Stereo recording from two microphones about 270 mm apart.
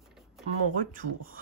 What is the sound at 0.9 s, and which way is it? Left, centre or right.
Speech, right.